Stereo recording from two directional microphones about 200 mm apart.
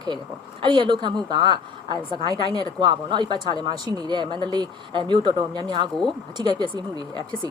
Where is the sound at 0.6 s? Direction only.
25° right (ahead or behind).